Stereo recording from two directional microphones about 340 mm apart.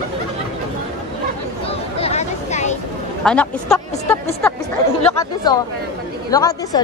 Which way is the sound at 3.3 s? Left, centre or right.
Centre.